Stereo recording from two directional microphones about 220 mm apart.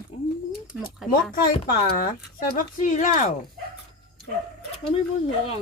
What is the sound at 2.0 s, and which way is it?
Speech, 40° left (ahead or behind).